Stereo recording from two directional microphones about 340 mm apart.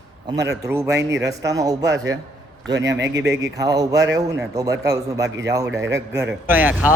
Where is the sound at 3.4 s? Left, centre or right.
Centre.